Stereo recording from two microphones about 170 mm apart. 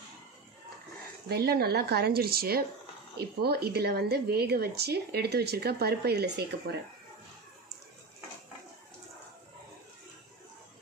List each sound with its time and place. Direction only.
1.3 s a woman's voice: 65° right (ahead or behind)